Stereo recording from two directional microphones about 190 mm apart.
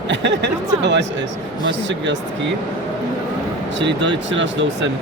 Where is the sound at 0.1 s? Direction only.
70° right (ahead or behind).